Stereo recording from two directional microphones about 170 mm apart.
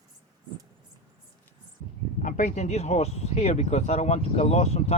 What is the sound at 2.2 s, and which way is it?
Speech, 45° left (ahead or behind).